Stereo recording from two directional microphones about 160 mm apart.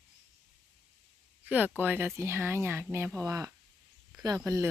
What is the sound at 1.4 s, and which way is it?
Speech, 10° right (ahead or behind).